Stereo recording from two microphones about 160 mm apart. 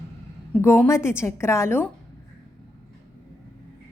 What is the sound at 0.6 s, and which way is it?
A woman's voice, 15° left (ahead or behind).